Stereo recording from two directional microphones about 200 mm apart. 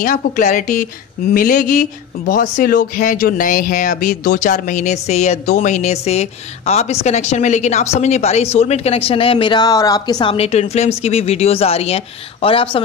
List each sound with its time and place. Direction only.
0.0 s speech: 40° left (ahead or behind)